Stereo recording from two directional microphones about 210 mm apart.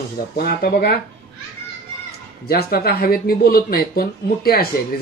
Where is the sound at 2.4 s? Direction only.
45° left (ahead or behind).